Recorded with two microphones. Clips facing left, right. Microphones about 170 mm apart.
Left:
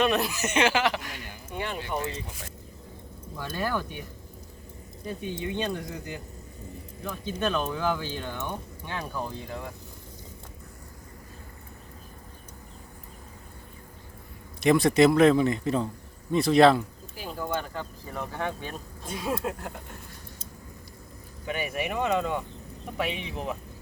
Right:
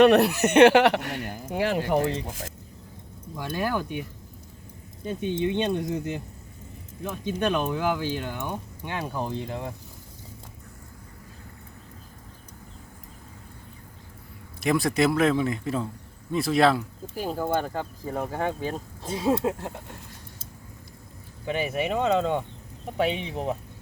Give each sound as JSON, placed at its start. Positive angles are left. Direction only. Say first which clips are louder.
{"t": 0.0, "sound": "speech", "louder": "right 8 dB", "side_deg": -70}
{"t": 1.9, "sound": "speech", "louder": "right 8 dB", "side_deg": -75}
{"t": 3.3, "sound": "speech", "louder": "right 2 dB", "side_deg": -15}
{"t": 5.0, "sound": "speech", "louder": "right 6 dB", "side_deg": -25}
{"t": 14.6, "sound": "a man's voice", "louder": "left 3 dB", "side_deg": 0}
{"t": 17.2, "sound": "speech", "louder": "right 5 dB", "side_deg": -40}
{"t": 21.4, "sound": "speech", "louder": "right 4 dB", "side_deg": -25}